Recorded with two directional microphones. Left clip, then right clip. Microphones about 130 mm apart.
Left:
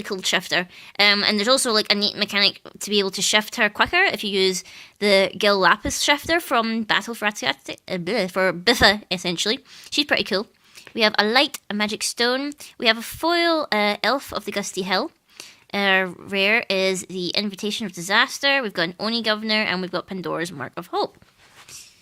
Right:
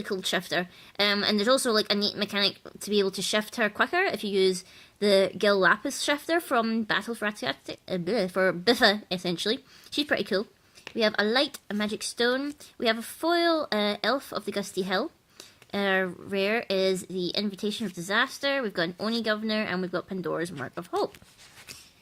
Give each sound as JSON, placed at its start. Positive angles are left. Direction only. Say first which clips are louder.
{"t": 0.0, "sound": "speech", "louder": "left 6 dB", "side_deg": 15}